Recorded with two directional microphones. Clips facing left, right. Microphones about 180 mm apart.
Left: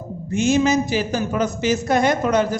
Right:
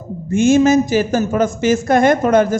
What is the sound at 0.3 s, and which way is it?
A man's voice, 50° right (ahead or behind).